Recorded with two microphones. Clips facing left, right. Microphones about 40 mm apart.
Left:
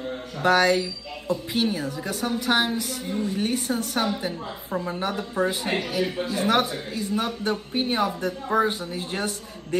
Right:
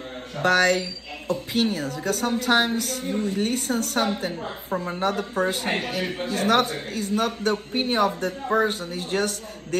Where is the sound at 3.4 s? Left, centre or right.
Left.